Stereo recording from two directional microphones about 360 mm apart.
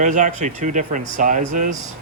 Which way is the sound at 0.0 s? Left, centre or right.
Right.